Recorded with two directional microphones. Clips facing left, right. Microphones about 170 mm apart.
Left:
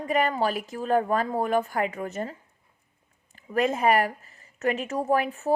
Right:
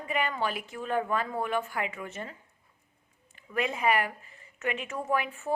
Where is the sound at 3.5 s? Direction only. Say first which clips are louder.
Left 5 dB; 40° left (ahead or behind).